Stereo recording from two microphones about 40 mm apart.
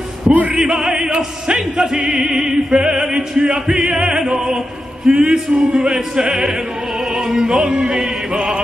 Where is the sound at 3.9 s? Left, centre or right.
Centre.